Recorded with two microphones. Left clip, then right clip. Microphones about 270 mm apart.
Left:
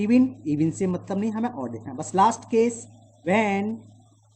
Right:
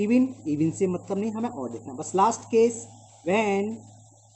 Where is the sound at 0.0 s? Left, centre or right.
Left.